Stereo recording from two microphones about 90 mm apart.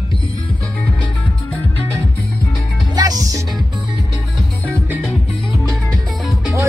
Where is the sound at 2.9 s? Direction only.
45° right (ahead or behind).